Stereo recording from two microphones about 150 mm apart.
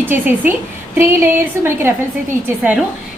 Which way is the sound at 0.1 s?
10° right (ahead or behind).